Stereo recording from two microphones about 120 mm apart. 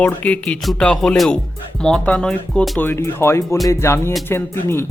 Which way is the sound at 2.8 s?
20° left (ahead or behind).